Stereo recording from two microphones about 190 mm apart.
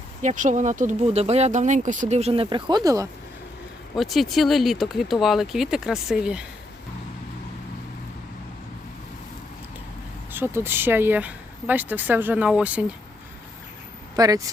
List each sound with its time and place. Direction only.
0.2 s speech: 40° right (ahead or behind); by 3.1 s 20° right (ahead or behind)
3.9 s speech: centre (ahead or behind)
10.3 s speech: 10° right (ahead or behind)
14.2 s speech: 20° right (ahead or behind)